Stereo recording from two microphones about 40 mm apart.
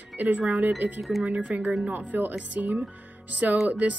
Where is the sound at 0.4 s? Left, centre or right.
Right.